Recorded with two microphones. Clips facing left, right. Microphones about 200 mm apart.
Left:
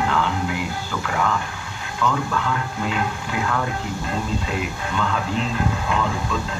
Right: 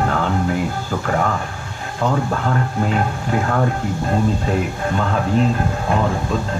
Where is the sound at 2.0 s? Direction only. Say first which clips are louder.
Right 3 dB; 40° right (ahead or behind).